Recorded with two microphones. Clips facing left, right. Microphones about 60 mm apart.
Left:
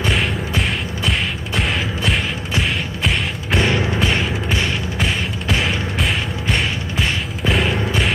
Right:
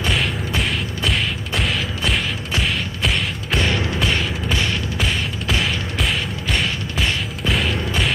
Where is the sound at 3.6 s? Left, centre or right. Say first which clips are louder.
Left 3 dB; centre.